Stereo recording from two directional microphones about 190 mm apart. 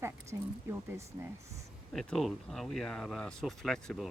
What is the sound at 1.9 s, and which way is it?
Speech, centre (ahead or behind).